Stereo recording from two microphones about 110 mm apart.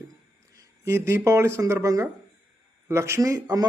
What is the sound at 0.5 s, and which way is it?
A man's voice, 30° right (ahead or behind).